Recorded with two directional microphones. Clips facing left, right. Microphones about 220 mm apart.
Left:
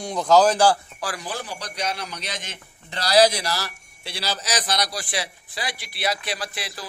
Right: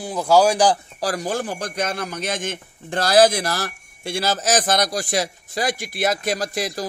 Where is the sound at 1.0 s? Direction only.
45° right (ahead or behind).